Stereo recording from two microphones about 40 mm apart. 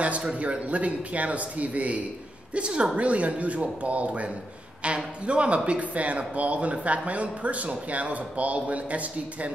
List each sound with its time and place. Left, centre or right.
0.4 s a woman's voice: right